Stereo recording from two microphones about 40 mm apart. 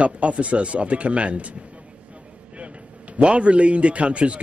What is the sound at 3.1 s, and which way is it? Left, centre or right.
A man's voice, right.